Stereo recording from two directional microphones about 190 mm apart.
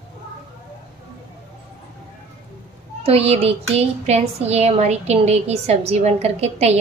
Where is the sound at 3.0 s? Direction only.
30° right (ahead or behind).